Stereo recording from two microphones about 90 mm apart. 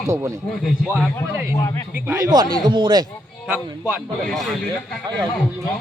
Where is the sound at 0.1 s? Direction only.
35° right (ahead or behind).